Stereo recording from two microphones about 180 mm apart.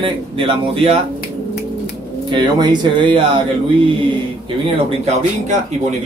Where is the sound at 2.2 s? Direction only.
25° right (ahead or behind).